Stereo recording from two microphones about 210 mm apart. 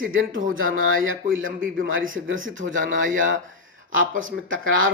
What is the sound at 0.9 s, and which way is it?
Speech, 70° right (ahead or behind).